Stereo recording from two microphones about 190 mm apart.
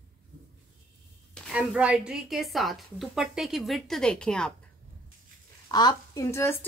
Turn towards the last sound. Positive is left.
turn(degrees=10)  # may be behind; listen again after turning